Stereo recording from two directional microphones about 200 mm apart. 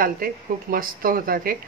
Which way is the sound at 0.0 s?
45° right (ahead or behind).